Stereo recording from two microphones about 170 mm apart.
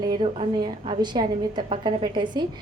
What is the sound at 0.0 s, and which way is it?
A woman's voice, 25° right (ahead or behind).